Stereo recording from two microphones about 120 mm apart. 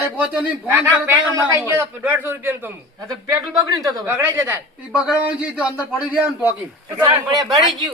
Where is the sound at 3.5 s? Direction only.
35° right (ahead or behind); by 6.5 s 15° right (ahead or behind).